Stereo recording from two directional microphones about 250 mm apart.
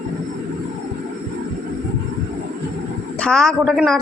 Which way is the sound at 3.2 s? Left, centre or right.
Centre.